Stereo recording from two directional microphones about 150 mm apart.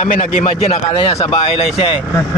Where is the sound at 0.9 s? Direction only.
30° left (ahead or behind).